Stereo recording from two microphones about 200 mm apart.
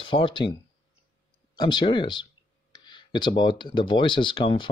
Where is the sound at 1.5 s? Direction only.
20° left (ahead or behind).